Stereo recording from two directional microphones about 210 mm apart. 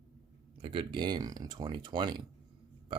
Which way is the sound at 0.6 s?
25° right (ahead or behind).